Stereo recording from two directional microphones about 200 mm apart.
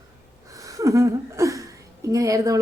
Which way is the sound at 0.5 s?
15° right (ahead or behind).